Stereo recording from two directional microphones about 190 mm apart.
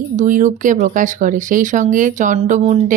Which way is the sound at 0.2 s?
40° right (ahead or behind).